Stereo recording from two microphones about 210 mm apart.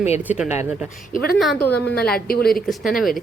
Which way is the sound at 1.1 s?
45° left (ahead or behind).